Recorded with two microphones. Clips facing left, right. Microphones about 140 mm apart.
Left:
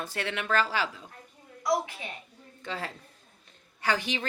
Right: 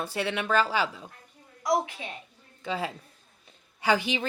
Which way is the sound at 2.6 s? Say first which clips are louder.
Right 5 dB; 10° right (ahead or behind).